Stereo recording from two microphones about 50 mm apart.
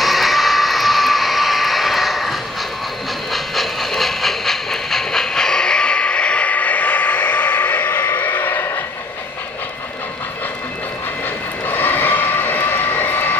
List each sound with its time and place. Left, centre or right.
0.0 s vehicle: centre
3.3 s train: centre; by 8.8 s left
11.6 s a sound: left